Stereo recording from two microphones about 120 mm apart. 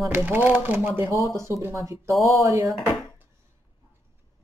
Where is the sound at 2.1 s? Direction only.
Centre (ahead or behind).